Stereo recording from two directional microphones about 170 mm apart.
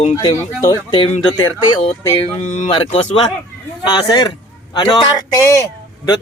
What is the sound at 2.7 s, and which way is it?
Speech, 35° left (ahead or behind).